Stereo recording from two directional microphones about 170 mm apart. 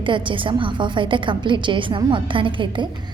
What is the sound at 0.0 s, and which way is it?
A woman's voice, 30° right (ahead or behind).